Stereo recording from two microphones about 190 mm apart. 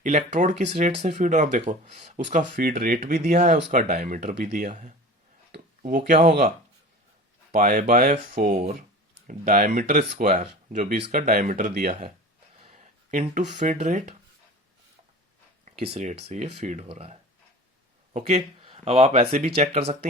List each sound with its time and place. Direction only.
0.0 s speech: 40° right (ahead or behind)
7.5 s speech: 45° right (ahead or behind)
12.5 s a sound: 35° right (ahead or behind)
13.6 s speech: 40° right (ahead or behind)
15.8 s speech: 35° right (ahead or behind)